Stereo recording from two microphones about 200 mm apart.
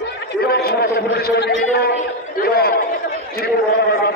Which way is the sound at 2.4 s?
50° left (ahead or behind).